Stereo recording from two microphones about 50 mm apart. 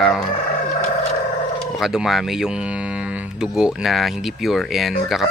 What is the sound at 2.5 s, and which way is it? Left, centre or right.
Music, right.